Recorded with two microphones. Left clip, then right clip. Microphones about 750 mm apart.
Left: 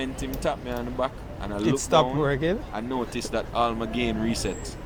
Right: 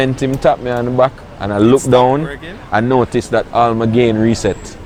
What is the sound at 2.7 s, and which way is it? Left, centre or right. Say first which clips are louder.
Speech: right 17 dB; right.